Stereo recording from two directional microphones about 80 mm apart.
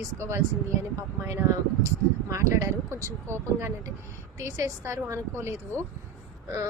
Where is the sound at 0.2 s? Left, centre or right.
Right.